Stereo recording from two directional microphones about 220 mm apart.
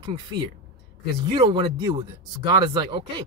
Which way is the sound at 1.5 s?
20° right (ahead or behind).